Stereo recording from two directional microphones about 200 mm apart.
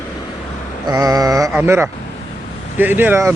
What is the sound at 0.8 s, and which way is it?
Speech, 20° right (ahead or behind).